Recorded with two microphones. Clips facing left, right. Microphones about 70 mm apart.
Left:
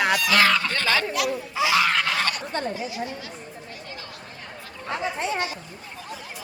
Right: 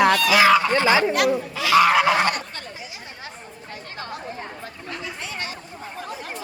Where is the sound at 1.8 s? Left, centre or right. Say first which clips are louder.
Right 6 dB; centre.